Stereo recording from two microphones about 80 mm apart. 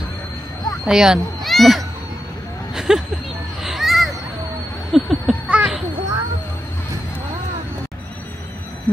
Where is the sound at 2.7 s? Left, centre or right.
Centre.